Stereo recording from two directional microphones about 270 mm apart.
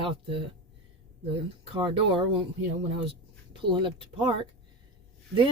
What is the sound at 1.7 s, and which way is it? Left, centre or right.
Speech, centre.